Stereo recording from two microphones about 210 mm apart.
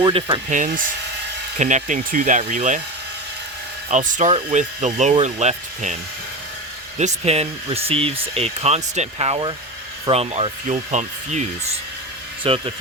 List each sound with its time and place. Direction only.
0.0 s speech: 25° right (ahead or behind)
0.5 s speech: 35° right (ahead or behind)
3.8 s speech: 35° right (ahead or behind)
7.0 s speech: 30° right (ahead or behind)